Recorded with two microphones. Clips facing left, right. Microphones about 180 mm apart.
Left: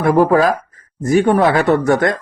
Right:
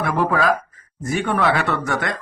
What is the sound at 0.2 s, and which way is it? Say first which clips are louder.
Speech: left 4 dB; 40° left (ahead or behind).